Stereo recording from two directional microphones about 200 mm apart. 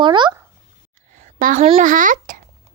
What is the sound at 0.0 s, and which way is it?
Speech, 25° right (ahead or behind).